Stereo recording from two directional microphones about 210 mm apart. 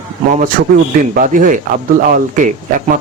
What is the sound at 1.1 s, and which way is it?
Speech, 40° right (ahead or behind).